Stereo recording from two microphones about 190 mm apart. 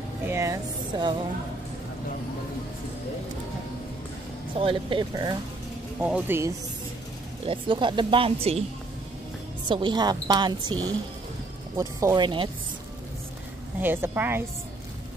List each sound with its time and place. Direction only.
0.2 s speech: 15° right (ahead or behind)
4.6 s a woman's voice: 25° right (ahead or behind)
5.9 s speech: 5° right (ahead or behind)
7.4 s a woman's voice: 25° right (ahead or behind)
9.7 s a woman's voice: 25° right (ahead or behind)
13.7 s speech: 10° right (ahead or behind)